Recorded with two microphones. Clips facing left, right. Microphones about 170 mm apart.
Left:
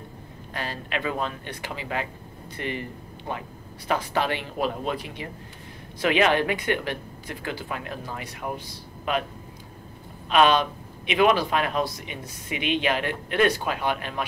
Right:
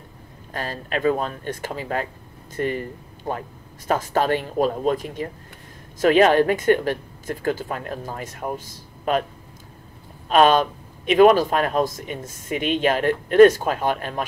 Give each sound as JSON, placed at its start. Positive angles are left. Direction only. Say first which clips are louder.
{"t": 0.5, "sound": "a man's voice", "louder": "right 3 dB", "side_deg": -40}
{"t": 10.3, "sound": "a man's voice", "louder": "right 4 dB", "side_deg": -45}